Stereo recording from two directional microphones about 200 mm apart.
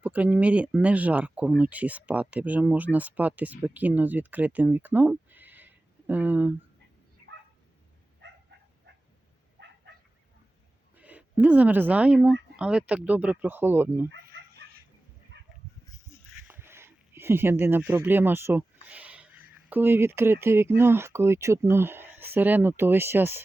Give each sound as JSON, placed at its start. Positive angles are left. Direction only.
{"t": 0.0, "sound": "speech", "side_deg": -5}
{"t": 10.9, "sound": "speech", "side_deg": -5}
{"t": 14.1, "sound": "chicken", "side_deg": -55}
{"t": 15.3, "sound": "a sound", "side_deg": -60}
{"t": 16.5, "sound": "a sound", "side_deg": -10}
{"t": 19.7, "sound": "speech", "side_deg": -10}